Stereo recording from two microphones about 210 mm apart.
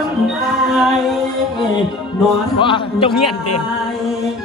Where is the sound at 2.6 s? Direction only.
25° left (ahead or behind).